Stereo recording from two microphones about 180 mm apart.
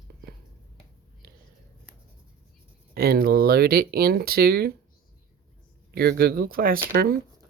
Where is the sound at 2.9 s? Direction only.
60° right (ahead or behind).